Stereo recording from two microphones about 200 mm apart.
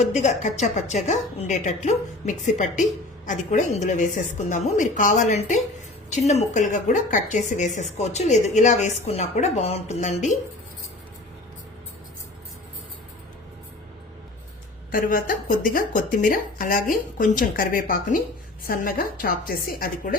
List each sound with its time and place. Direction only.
0.0 s a woman's voice: 35° left (ahead or behind)
14.9 s speech: 45° left (ahead or behind)